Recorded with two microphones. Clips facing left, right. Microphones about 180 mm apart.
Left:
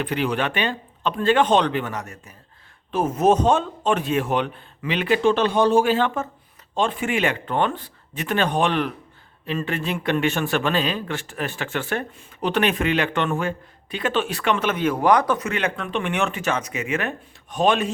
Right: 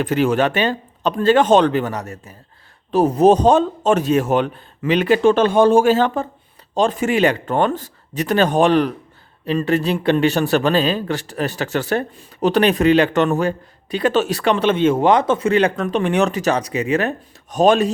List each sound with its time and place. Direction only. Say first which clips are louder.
0.0 s a man's voice: right 7 dB; 45° right (ahead or behind)